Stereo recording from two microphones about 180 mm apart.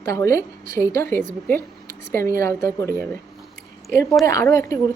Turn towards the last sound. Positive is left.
turn(degrees=15)  # may be behind; listen again after turning